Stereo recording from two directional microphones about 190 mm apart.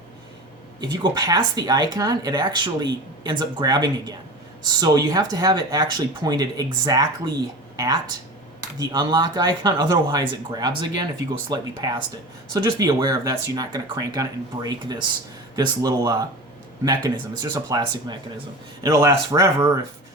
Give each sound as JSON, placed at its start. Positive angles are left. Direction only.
{"t": 0.8, "sound": "speech", "side_deg": -20}
{"t": 8.8, "sound": "speech", "side_deg": -20}